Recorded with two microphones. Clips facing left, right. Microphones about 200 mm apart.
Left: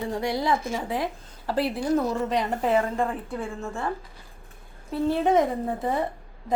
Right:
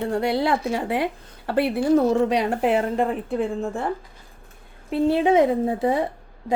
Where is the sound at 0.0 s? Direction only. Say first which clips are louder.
Right 5 dB; 65° right (ahead or behind).